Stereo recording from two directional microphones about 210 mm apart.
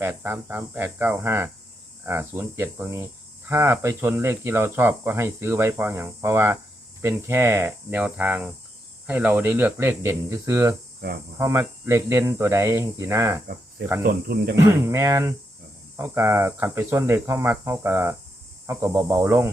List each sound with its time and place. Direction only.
0.0 s speech: 10° right (ahead or behind)
14.0 s speech: 45° right (ahead or behind)
14.5 s speech: 15° right (ahead or behind)